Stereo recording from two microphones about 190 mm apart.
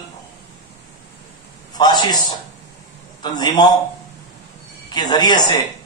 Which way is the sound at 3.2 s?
20° left (ahead or behind).